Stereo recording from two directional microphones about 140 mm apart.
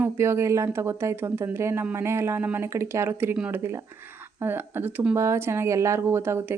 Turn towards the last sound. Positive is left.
turn(degrees=-15)  # may be behind; listen again after turning